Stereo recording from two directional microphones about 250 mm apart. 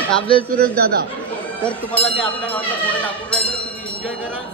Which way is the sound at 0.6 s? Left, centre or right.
Right.